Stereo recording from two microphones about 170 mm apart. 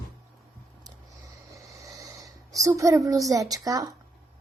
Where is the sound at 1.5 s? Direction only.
20° right (ahead or behind).